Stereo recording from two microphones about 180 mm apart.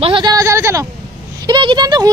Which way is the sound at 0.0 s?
25° right (ahead or behind).